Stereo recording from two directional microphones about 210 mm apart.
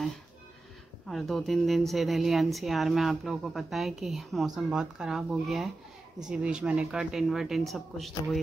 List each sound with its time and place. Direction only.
1.0 s speech: centre (ahead or behind)